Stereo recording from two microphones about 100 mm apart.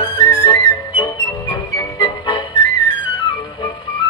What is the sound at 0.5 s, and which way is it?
Music, 45° left (ahead or behind).